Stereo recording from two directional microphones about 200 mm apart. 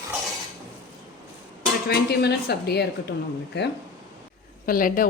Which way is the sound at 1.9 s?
55° left (ahead or behind).